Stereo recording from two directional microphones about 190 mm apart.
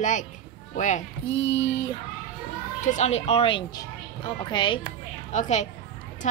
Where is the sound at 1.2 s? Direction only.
75° left (ahead or behind).